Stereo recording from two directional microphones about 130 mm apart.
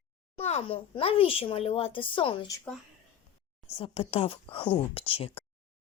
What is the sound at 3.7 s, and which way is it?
A child's voice, 50° left (ahead or behind).